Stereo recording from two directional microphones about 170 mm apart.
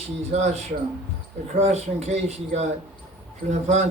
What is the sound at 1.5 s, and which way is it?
Speech, 40° right (ahead or behind).